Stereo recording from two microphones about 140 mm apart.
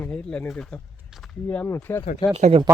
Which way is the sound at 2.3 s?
50° right (ahead or behind).